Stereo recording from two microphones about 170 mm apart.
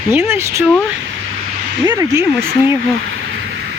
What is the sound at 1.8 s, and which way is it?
Speech, 20° right (ahead or behind).